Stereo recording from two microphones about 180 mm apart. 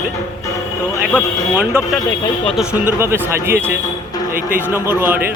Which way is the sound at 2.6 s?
10° right (ahead or behind).